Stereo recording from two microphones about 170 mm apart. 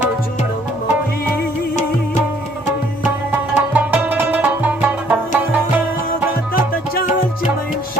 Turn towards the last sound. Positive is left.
turn(degrees=60)  # may be behind; listen again after turning